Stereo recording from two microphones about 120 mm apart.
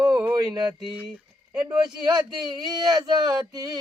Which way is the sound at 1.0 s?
10° right (ahead or behind).